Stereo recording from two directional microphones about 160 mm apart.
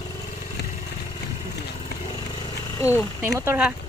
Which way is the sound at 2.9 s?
10° right (ahead or behind).